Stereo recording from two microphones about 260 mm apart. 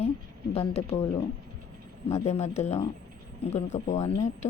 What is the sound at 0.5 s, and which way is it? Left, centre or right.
Speech, left.